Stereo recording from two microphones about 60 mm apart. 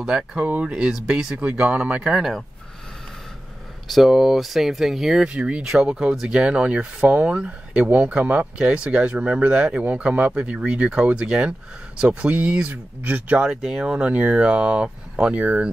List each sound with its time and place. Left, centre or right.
0.0 s speech: centre
3.9 s speech: centre
5.3 s speech: right
5.6 s speech: centre; by 13.5 s right
13.6 s speech: centre